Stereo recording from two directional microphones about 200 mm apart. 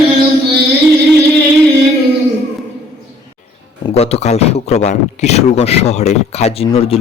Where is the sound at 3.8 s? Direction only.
30° left (ahead or behind).